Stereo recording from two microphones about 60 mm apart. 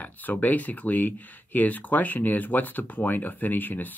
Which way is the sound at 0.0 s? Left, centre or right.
Left.